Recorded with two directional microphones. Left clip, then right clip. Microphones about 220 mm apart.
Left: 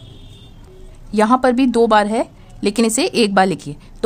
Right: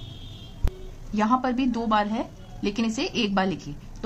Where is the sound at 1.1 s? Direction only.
50° left (ahead or behind).